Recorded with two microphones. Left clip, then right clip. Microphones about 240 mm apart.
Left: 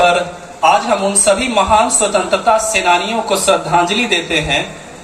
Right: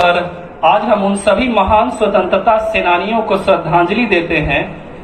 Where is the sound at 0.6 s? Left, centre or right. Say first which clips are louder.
Right 1 dB; left.